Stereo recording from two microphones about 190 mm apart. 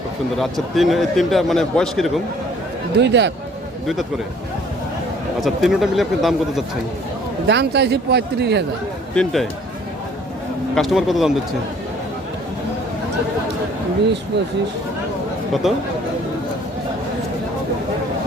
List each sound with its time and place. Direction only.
0.8 s a man's voice: centre (ahead or behind)
3.0 s speech: 65° right (ahead or behind)
5.4 s a man's voice: centre (ahead or behind)
7.4 s speech: 60° right (ahead or behind)
9.1 s a man's voice: centre (ahead or behind)
10.8 s a man's voice: centre (ahead or behind)
15.6 s a man's voice: centre (ahead or behind)